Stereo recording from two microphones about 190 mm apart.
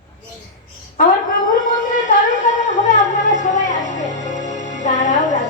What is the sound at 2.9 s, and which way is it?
Speech, 40° left (ahead or behind).